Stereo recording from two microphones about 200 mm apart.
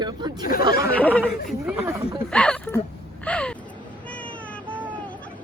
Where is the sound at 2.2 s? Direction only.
5° left (ahead or behind).